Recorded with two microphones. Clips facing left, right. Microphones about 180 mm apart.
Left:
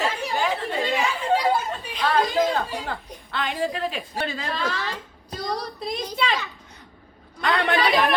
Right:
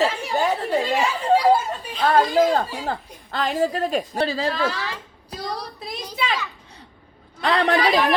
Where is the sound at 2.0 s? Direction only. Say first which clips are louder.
Right 4 dB; 45° right (ahead or behind).